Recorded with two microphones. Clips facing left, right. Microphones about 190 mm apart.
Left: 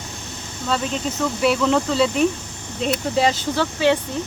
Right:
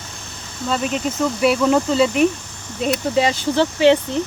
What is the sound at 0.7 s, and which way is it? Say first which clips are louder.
Speech: right 2 dB; 15° right (ahead or behind).